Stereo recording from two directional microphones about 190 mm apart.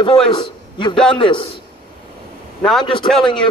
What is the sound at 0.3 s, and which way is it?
A man's voice, 25° left (ahead or behind).